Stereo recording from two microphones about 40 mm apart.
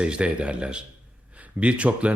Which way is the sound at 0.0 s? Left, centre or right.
Right.